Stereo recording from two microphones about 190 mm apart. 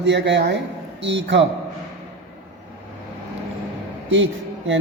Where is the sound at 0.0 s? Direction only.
65° right (ahead or behind).